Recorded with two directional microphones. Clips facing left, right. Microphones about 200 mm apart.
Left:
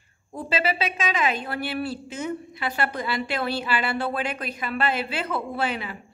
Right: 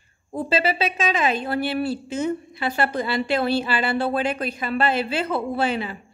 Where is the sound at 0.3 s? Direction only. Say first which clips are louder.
Right 4 dB; 30° right (ahead or behind).